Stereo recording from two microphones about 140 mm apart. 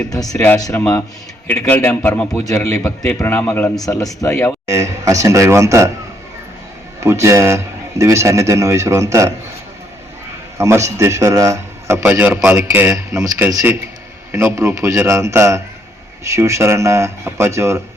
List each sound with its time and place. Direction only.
0.1 s speech: 25° left (ahead or behind)
1.5 s a man's voice: 10° left (ahead or behind)
2.3 s a man's voice: 25° left (ahead or behind)
3.8 s speech: 25° left (ahead or behind)
4.6 s a man's voice: 20° right (ahead or behind)
7.0 s a man's voice: 20° right (ahead or behind)
10.6 s a man's voice: 20° right (ahead or behind)
14.3 s a man's voice: 20° right (ahead or behind)